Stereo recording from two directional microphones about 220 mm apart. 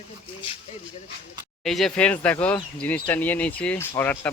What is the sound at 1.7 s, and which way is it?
A man's voice, centre (ahead or behind).